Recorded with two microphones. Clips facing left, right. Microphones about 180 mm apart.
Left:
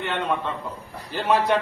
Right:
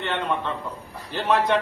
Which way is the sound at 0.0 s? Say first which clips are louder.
Left 1 dB; centre (ahead or behind).